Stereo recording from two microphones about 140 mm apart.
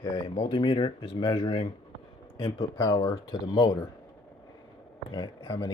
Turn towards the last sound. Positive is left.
turn(degrees=35)  # may be behind; listen again after turning